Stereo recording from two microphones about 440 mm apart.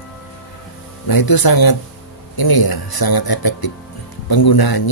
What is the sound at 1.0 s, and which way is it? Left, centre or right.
Speech, left.